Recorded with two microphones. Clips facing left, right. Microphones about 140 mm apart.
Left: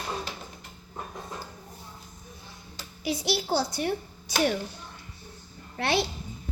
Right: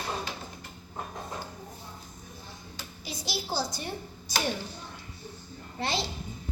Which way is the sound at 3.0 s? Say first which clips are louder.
Left 9 dB; 65° left (ahead or behind).